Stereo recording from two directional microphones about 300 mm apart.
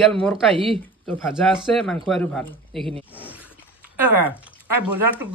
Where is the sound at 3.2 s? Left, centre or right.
Centre.